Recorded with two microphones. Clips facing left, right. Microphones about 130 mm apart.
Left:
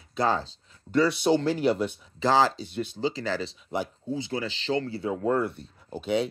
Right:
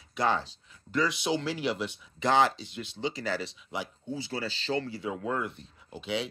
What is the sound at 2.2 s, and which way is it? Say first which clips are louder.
Speech: left 2 dB; 30° left (ahead or behind).